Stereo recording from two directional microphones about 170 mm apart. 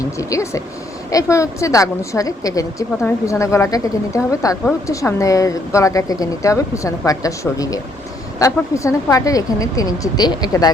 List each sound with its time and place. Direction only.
0.2 s a woman's voice: 20° left (ahead or behind)